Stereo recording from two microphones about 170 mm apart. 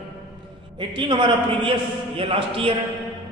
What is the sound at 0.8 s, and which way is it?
A man's voice, 30° right (ahead or behind).